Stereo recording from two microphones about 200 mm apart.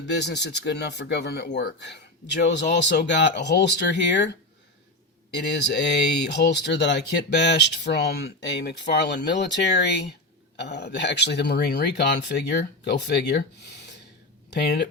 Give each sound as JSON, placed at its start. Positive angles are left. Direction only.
{"t": 0.0, "sound": "speech", "side_deg": 60}
{"t": 5.5, "sound": "speech", "side_deg": 60}
{"t": 14.5, "sound": "speech", "side_deg": 55}